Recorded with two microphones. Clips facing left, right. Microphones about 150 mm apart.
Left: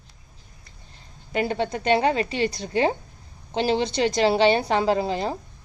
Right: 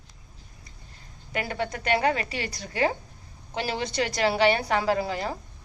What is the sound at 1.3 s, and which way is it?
A woman's voice, 25° left (ahead or behind).